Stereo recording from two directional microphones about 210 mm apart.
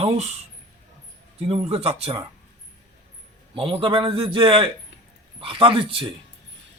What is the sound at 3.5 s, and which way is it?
Speech, 25° right (ahead or behind).